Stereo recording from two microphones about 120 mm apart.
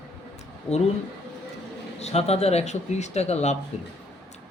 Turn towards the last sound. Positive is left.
turn(degrees=65)  # may be behind; listen again after turning